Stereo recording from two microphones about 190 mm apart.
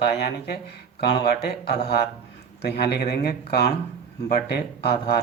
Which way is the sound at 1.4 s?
55° left (ahead or behind).